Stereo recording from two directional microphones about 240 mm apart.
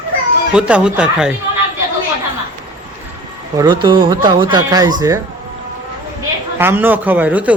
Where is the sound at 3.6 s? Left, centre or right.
Centre.